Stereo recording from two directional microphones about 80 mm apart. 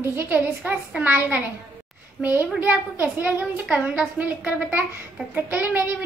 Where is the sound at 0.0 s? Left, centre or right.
Right.